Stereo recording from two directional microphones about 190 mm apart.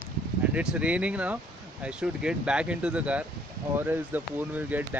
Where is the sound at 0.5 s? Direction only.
5° right (ahead or behind).